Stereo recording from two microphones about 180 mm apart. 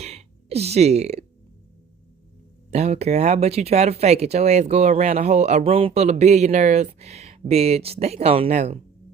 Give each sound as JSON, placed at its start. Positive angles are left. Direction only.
{"t": 0.0, "sound": "gasp", "side_deg": -35}
{"t": 2.6, "sound": "speech", "side_deg": -40}